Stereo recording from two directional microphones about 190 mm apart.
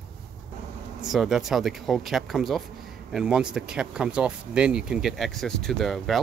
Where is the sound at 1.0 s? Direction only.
Centre (ahead or behind).